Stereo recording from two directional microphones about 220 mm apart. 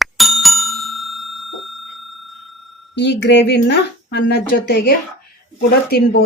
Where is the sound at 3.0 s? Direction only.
50° left (ahead or behind).